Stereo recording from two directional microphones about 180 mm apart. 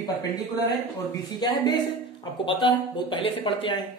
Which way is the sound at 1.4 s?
25° left (ahead or behind).